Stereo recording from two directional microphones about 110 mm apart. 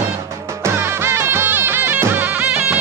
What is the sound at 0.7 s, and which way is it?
Music, 20° right (ahead or behind).